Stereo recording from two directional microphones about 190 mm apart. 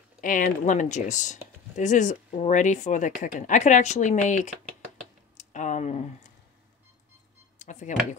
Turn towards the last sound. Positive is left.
turn(degrees=40)  # may be behind; listen again after turning